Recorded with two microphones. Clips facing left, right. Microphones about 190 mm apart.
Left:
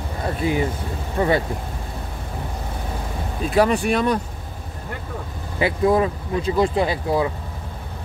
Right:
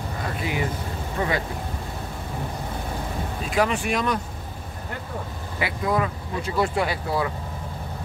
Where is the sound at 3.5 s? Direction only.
35° left (ahead or behind).